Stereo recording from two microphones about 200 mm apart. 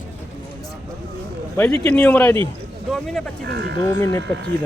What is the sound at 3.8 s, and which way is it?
Speech, 15° left (ahead or behind).